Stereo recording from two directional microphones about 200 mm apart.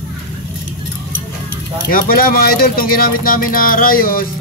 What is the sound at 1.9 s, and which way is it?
Speech, 45° left (ahead or behind).